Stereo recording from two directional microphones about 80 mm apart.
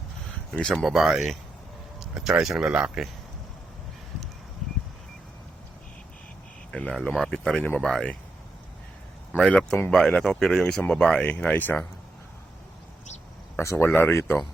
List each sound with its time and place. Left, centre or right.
0.5 s speech: centre
0.8 s speech: centre
2.0 s vehicle: centre
2.4 s speech: centre
4.6 s a sound: centre
6.7 s speech: centre
7.6 s speech: centre
9.5 s speech: centre
13.6 s speech: left
13.8 s speech: left